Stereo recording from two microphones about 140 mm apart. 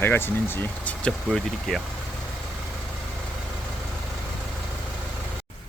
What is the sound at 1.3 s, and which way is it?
Speech, centre (ahead or behind).